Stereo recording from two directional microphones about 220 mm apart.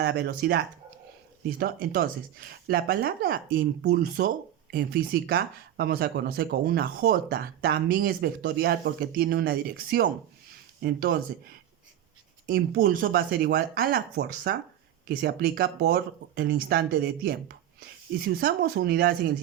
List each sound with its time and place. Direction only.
0.0 s speech: 50° right (ahead or behind)
12.5 s speech: 45° right (ahead or behind)